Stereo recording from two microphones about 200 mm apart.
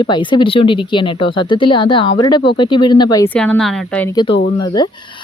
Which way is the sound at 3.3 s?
5° left (ahead or behind).